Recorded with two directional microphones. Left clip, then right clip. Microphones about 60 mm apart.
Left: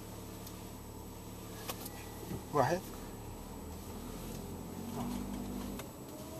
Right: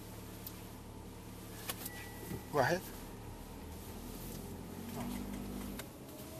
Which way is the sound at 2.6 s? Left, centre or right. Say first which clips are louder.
Left 1 dB; right.